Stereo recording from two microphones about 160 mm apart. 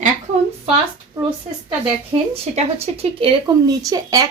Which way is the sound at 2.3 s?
40° right (ahead or behind).